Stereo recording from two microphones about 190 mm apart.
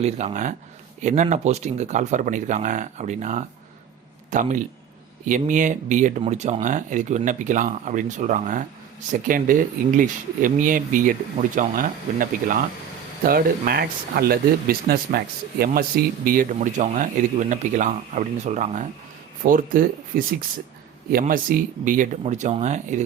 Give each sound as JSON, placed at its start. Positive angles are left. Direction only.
{"t": 0.0, "sound": "speech", "side_deg": -35}